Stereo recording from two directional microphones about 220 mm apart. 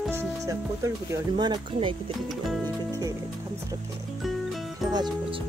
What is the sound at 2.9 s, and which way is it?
Music, 15° right (ahead or behind).